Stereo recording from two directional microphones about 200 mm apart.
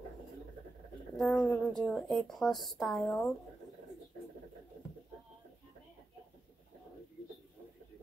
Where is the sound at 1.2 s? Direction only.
Centre (ahead or behind).